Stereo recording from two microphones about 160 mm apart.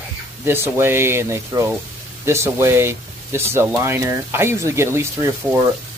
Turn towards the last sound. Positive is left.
turn(degrees=-15)  # may be behind; listen again after turning